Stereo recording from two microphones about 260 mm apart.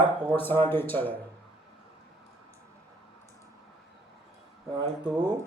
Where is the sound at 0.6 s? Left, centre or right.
Centre.